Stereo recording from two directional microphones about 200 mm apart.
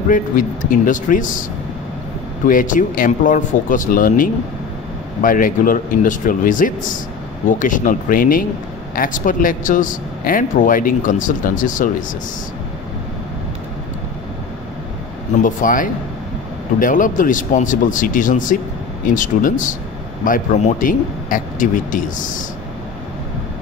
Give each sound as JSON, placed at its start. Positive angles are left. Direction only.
{"t": 0.7, "sound": "speech", "side_deg": 40}
{"t": 2.4, "sound": "speech", "side_deg": 40}
{"t": 15.4, "sound": "speech", "side_deg": 40}